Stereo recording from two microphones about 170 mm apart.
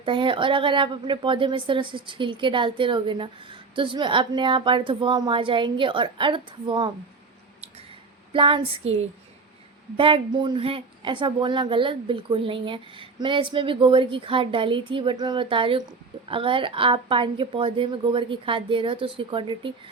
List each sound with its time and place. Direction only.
0.0 s a woman's voice: 30° right (ahead or behind)
8.3 s a woman's voice: 30° right (ahead or behind)